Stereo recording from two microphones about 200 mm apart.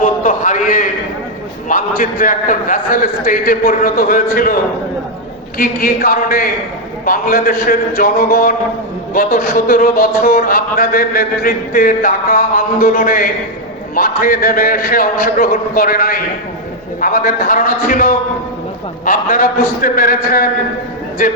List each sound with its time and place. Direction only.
0.0 s a sound: 40° left (ahead or behind)
1.6 s speech: 45° left (ahead or behind)
5.5 s speech: 50° left (ahead or behind)